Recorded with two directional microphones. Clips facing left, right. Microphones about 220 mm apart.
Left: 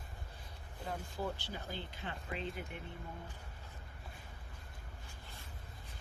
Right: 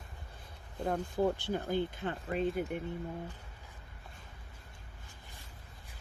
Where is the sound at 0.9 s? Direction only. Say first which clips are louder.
Right 10 dB; 55° right (ahead or behind).